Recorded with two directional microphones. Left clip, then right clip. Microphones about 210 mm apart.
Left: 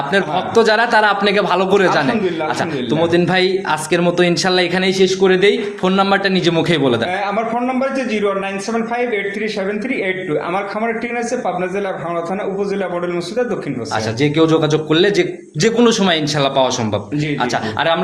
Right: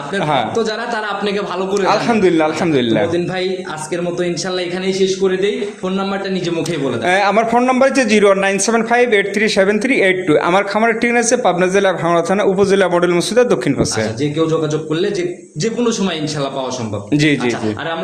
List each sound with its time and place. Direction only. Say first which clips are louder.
0.1 s a man's voice: right 1 dB; 40° left (ahead or behind)
3.1 s a man's voice: left 4 dB; 40° left (ahead or behind)
7.1 s a man's voice: right 6 dB; 55° right (ahead or behind)
14.2 s a man's voice: left 5 dB; 35° left (ahead or behind)